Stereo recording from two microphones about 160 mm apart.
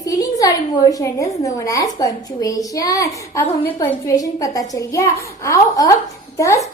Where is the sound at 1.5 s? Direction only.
20° left (ahead or behind).